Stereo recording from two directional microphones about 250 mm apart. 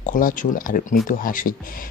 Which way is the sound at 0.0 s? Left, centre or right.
Left.